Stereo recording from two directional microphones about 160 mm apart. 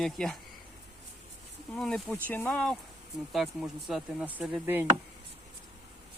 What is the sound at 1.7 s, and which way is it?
Speech, 5° left (ahead or behind).